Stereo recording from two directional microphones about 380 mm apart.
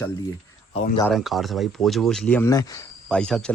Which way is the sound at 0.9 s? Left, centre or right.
Centre.